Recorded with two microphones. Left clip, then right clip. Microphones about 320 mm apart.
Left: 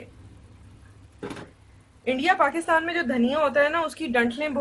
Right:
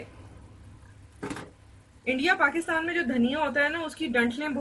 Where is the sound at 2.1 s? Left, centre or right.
Centre.